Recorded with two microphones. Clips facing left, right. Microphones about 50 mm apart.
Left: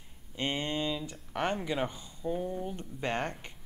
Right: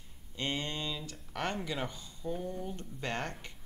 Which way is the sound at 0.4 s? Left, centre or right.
Left.